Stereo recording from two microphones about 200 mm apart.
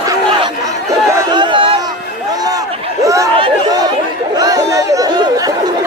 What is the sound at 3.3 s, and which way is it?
Chatter, 25° right (ahead or behind).